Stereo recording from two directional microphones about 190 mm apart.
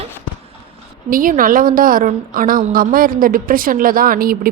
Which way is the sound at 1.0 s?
45° right (ahead or behind).